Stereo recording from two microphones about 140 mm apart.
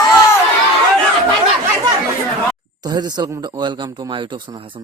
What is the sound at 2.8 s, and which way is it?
A man's voice, 30° right (ahead or behind).